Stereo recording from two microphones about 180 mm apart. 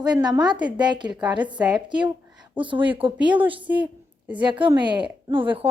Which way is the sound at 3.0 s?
25° right (ahead or behind).